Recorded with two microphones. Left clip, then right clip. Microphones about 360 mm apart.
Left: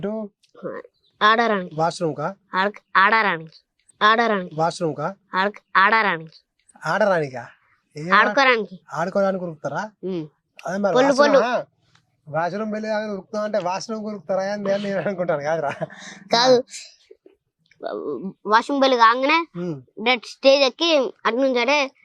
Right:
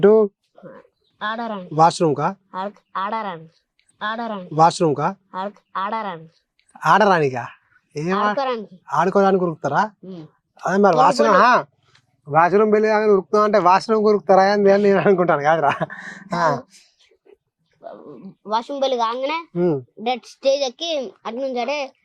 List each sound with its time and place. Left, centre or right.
0.0 s speech: right
1.7 s speech: right
2.5 s a child's voice: left
4.0 s speech: left
4.5 s speech: right
5.5 s speech: left
5.9 s a child's voice: left
6.7 s a woman's voice: right
11.3 s a man's voice: right
16.3 s speech: left
18.4 s a child's voice: left
19.5 s speech: right
20.0 s a child's voice: left